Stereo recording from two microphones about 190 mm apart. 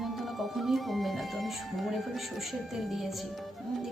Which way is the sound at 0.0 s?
Centre (ahead or behind).